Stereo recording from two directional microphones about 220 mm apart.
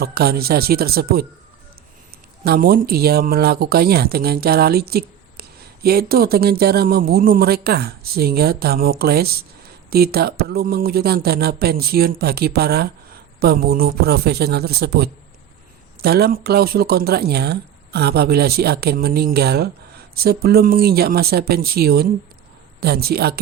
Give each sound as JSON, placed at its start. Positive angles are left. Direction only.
{"t": 0.0, "sound": "speech", "side_deg": -45}
{"t": 2.4, "sound": "speech", "side_deg": -45}